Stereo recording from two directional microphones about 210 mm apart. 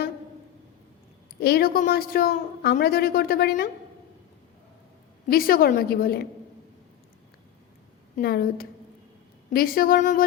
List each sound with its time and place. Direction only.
1.4 s a woman's voice: 50° left (ahead or behind)
5.3 s a woman's voice: 45° left (ahead or behind)
8.1 s a woman's voice: 45° left (ahead or behind)